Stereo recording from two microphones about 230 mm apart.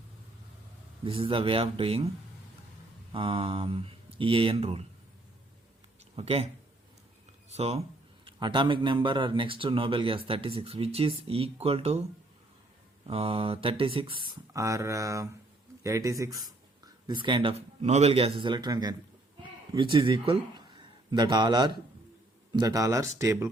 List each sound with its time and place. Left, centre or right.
1.0 s speech: right
3.1 s speech: right
6.1 s speech: right
7.5 s speech: right
13.1 s speech: right